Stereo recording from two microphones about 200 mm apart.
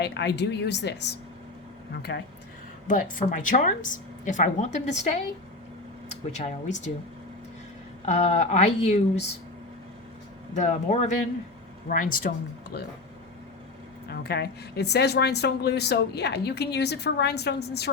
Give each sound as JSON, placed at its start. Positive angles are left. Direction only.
{"t": 0.0, "sound": "speech", "side_deg": 60}
{"t": 2.8, "sound": "speech", "side_deg": 40}
{"t": 8.0, "sound": "speech", "side_deg": 35}
{"t": 10.5, "sound": "speech", "side_deg": 35}
{"t": 14.1, "sound": "speech", "side_deg": 55}